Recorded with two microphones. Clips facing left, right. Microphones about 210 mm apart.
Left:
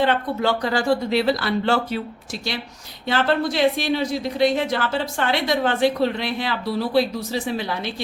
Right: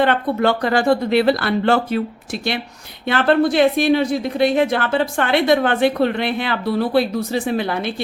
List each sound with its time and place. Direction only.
0.0 s a woman's voice: 60° right (ahead or behind)